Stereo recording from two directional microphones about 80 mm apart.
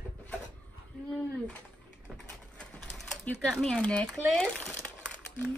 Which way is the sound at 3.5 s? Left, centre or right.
Centre.